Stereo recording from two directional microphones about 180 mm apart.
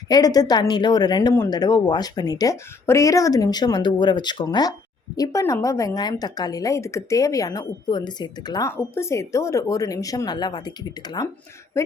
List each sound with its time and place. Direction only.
0.1 s a woman's voice: 20° left (ahead or behind)